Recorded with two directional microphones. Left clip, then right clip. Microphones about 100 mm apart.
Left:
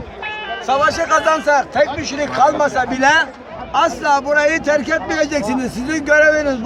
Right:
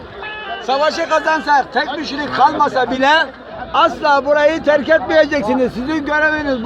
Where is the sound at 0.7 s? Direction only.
25° left (ahead or behind).